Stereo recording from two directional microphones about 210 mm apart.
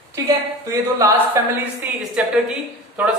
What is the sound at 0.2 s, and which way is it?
A man's voice, 15° right (ahead or behind).